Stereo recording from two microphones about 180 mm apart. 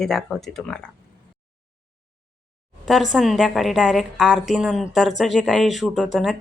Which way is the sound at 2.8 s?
Centre (ahead or behind).